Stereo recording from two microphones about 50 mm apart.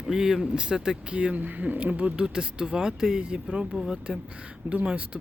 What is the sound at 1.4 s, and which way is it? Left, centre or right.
Speech, right.